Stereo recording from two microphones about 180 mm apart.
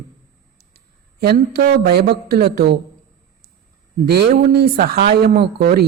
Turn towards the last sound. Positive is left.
turn(degrees=-60)  # may be behind; listen again after turning